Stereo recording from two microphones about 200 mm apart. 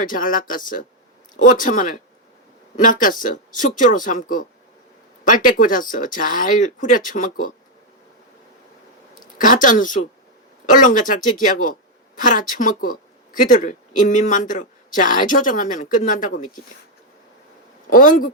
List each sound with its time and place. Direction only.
0.0 s speech: 40° left (ahead or behind)
9.2 s a woman's voice: 40° left (ahead or behind)
17.8 s a woman's voice: 45° left (ahead or behind)